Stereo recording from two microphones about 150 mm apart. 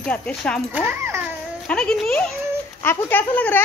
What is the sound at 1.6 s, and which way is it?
Speech, 5° left (ahead or behind).